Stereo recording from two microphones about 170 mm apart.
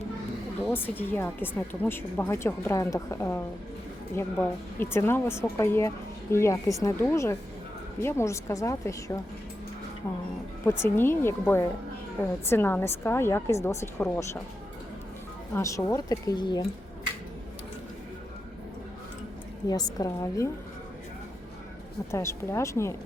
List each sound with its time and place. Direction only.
0.7 s a woman's voice: 10° left (ahead or behind)
10.6 s a woman's voice: 15° left (ahead or behind)
15.5 s speech: 15° left (ahead or behind)
19.6 s speech: 20° left (ahead or behind)
22.1 s a woman's voice: 15° left (ahead or behind)